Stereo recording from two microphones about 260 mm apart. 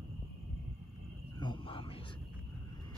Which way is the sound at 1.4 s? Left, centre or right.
Centre.